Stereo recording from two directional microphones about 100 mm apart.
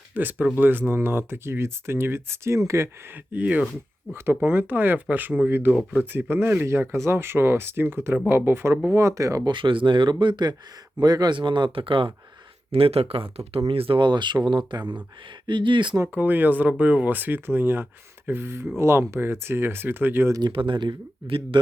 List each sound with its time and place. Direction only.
0.1 s speech: 20° right (ahead or behind)
3.3 s speech: 15° right (ahead or behind); by 9.5 s 35° right (ahead or behind)
9.5 s speech: 55° right (ahead or behind)
12.7 s speech: 75° right (ahead or behind)
13.7 s speech: 65° right (ahead or behind)
16.1 s speech: 20° right (ahead or behind)
20.5 s speech: 55° right (ahead or behind)